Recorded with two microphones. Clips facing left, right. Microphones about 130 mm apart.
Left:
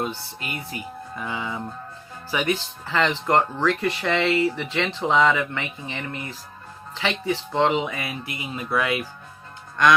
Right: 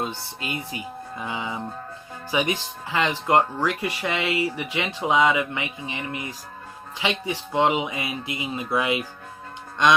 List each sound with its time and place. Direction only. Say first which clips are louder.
0.0 s speech: left 1 dB; 20° right (ahead or behind)